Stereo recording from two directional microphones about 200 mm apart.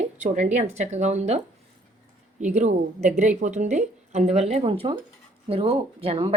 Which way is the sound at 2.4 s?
35° right (ahead or behind).